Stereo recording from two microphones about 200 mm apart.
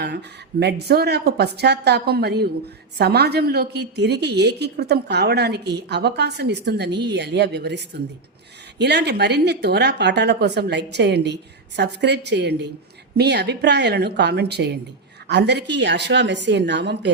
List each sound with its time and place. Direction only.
0.0 s a woman's voice: 55° right (ahead or behind)